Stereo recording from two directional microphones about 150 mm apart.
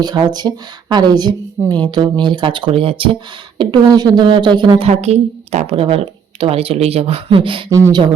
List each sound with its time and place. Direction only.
0.0 s a woman's voice: 30° right (ahead or behind)
4.9 s a woman's voice: 45° right (ahead or behind)
7.7 s speech: 20° right (ahead or behind)